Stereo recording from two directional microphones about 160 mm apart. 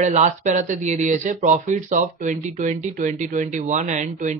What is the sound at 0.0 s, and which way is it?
Speech, 50° right (ahead or behind).